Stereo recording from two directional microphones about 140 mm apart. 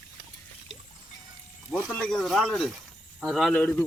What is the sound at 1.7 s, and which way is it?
A man's voice, 5° left (ahead or behind).